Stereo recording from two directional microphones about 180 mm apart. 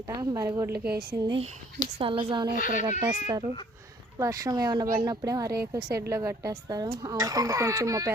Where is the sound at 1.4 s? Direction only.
35° right (ahead or behind).